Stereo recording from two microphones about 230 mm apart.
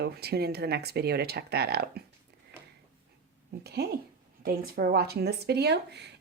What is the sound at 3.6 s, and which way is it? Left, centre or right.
Speech, right.